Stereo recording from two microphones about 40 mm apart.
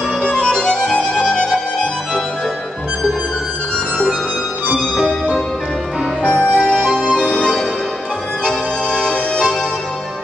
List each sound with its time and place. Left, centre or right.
0.2 s music: left
4.6 s music: right
6.3 s music: right
7.2 s organ: left
8.5 s music: left